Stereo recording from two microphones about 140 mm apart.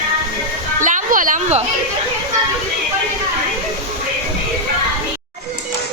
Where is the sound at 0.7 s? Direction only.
65° right (ahead or behind).